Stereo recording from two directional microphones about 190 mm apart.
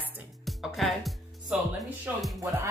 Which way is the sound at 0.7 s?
Centre (ahead or behind).